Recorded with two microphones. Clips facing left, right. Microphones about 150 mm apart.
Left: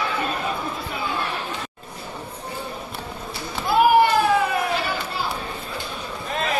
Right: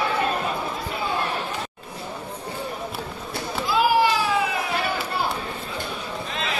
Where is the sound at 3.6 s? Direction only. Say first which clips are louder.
Left 4 dB; 55° left (ahead or behind).